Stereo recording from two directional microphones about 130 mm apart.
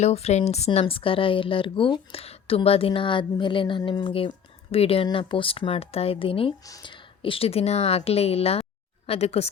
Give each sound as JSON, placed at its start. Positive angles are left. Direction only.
{"t": 0.0, "sound": "a woman's voice", "side_deg": 55}
{"t": 6.7, "sound": "a woman's voice", "side_deg": 30}